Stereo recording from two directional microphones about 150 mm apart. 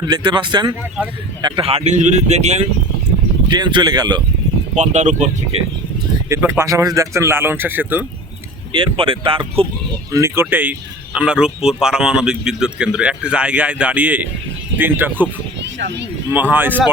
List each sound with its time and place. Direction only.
0.1 s speech: 30° right (ahead or behind); by 2.6 s 50° right (ahead or behind)
3.5 s speech: 30° right (ahead or behind)
4.7 s speech: 50° right (ahead or behind)
6.2 s speech: 15° right (ahead or behind)
8.7 s speech: 35° right (ahead or behind)
10.1 s speech: 20° right (ahead or behind)
16.3 s speech: 10° right (ahead or behind)